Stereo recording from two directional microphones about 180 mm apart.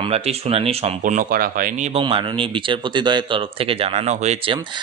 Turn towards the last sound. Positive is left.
turn(degrees=-35)  # may be behind; listen again after turning